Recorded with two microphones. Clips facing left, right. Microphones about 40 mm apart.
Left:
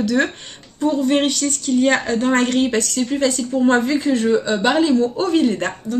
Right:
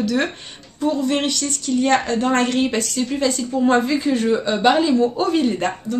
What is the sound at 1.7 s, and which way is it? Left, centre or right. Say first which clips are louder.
Speech: left 2 dB; centre.